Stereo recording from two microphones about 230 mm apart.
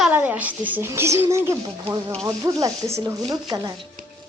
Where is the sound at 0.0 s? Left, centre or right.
Centre.